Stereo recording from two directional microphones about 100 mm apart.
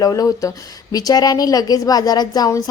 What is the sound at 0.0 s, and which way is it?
Speech, 35° left (ahead or behind).